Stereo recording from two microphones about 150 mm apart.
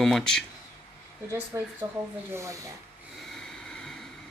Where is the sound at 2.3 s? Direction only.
20° right (ahead or behind).